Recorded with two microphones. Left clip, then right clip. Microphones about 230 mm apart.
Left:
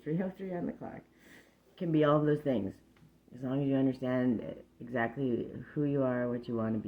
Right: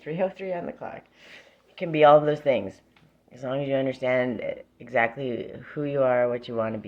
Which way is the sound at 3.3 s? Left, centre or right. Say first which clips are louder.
Right 7 dB; centre.